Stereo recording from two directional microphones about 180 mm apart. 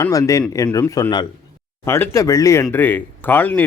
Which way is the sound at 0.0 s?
20° left (ahead or behind).